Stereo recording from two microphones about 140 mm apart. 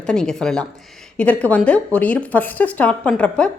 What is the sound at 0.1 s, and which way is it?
A woman's voice, 5° left (ahead or behind).